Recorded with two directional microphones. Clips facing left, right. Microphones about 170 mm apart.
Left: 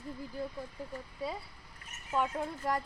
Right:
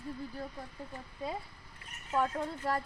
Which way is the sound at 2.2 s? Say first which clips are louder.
Even; 15° left (ahead or behind).